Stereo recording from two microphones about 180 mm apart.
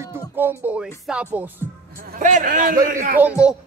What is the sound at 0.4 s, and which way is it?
Speech, 10° right (ahead or behind).